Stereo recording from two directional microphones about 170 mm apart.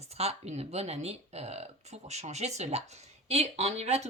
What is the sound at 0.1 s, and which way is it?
Speech, 35° right (ahead or behind).